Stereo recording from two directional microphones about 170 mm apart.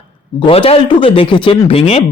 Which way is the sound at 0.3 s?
30° left (ahead or behind).